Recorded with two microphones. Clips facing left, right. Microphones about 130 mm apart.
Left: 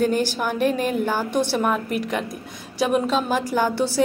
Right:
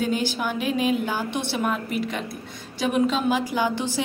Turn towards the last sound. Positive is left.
turn(degrees=40)  # may be behind; listen again after turning